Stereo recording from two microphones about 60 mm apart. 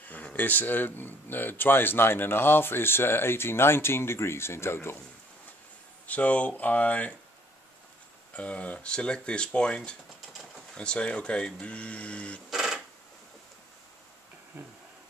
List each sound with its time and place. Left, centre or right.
0.0 s speech: left
6.0 s speech: left
8.4 s speech: left
12.4 s a sound: centre